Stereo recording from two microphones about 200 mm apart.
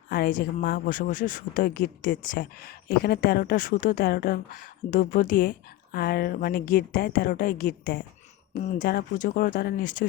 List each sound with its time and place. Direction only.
0.1 s speech: 45° left (ahead or behind)